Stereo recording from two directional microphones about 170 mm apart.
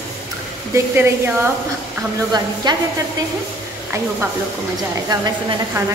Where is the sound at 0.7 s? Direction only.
15° right (ahead or behind).